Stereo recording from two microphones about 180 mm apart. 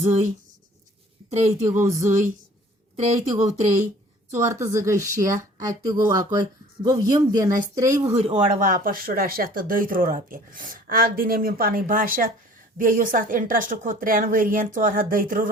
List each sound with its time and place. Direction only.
0.0 s speech: 35° right (ahead or behind)
1.3 s speech: 40° right (ahead or behind)
1.6 s a sound: 15° right (ahead or behind)
4.4 s speech: 15° right (ahead or behind)
8.0 s speech: 35° right (ahead or behind)